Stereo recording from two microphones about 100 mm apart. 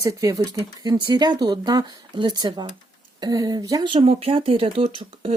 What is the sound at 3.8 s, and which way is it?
Speech, 65° right (ahead or behind).